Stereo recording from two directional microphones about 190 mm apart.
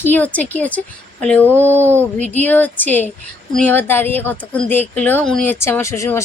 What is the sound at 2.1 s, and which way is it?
Speech, 35° right (ahead or behind).